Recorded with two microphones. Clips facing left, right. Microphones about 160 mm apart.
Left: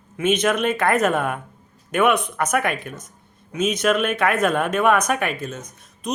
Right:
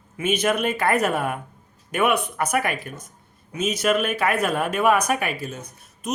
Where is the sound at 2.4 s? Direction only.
50° left (ahead or behind).